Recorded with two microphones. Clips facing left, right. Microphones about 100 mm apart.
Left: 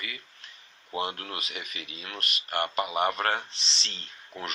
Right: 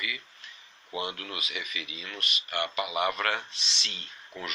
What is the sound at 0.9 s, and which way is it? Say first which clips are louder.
Speech: left 2 dB; 45° left (ahead or behind).